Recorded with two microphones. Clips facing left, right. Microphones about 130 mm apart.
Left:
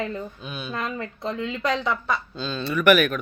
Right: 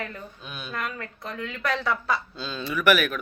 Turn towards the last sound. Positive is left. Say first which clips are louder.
# left 4 dB
turn(degrees=0)  # may be behind; listen again after turning